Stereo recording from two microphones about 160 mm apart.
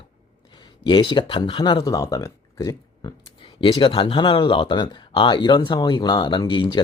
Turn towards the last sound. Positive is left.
turn(degrees=30)  # may be behind; listen again after turning